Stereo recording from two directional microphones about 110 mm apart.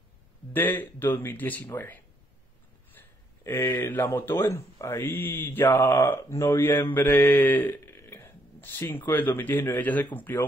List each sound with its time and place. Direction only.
0.5 s speech: 15° left (ahead or behind)
3.0 s speech: 20° left (ahead or behind)